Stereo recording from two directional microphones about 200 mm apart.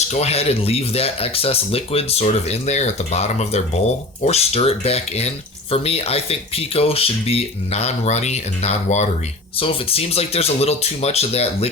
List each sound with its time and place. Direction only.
0.1 s speech: 30° left (ahead or behind)